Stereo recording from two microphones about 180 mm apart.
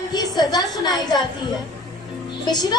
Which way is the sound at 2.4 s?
20° left (ahead or behind).